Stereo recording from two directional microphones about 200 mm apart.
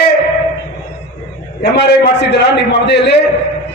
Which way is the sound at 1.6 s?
55° left (ahead or behind).